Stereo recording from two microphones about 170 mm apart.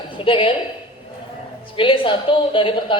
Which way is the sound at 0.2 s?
30° left (ahead or behind).